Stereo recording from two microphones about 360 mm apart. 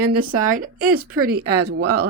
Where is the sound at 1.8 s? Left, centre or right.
Right.